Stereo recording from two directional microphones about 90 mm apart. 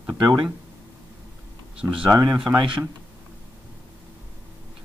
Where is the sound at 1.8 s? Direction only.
10° right (ahead or behind).